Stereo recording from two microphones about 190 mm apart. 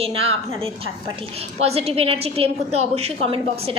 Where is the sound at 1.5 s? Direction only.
35° right (ahead or behind).